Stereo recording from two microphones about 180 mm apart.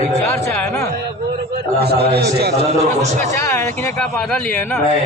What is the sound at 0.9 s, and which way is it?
A man's voice, 60° right (ahead or behind).